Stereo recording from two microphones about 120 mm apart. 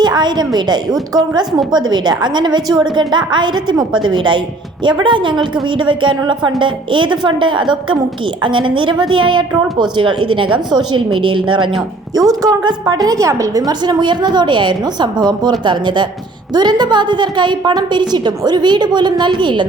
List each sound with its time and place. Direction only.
0.0 s a woman's voice: 35° right (ahead or behind)